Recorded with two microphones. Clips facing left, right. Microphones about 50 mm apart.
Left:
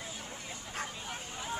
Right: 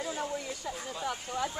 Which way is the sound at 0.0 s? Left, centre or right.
Right.